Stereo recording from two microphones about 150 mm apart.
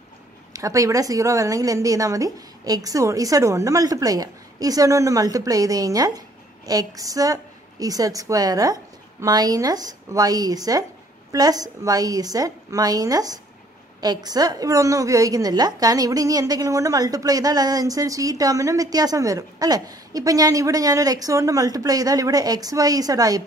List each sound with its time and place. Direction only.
0.5 s a woman's voice: 20° right (ahead or behind)